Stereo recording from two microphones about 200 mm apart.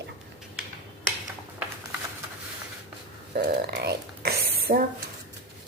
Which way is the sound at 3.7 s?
55° right (ahead or behind).